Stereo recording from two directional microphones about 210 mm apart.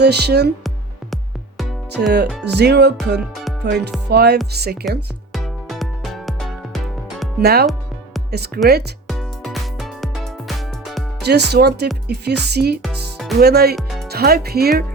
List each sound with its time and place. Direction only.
0.0 s music: 50° right (ahead or behind)
1.1 s music: centre (ahead or behind)
2.4 s music: 50° right (ahead or behind)
3.2 s music: centre (ahead or behind)
3.6 s music: 55° right (ahead or behind)
5.3 s music: centre (ahead or behind)
7.4 s music: 50° right (ahead or behind)
9.0 s music: centre (ahead or behind)
11.3 s music: 50° right (ahead or behind)
12.8 s music: centre (ahead or behind)
13.4 s music: 50° right (ahead or behind)